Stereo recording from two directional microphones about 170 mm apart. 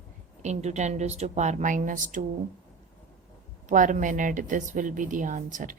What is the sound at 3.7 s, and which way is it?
Speech, 50° right (ahead or behind).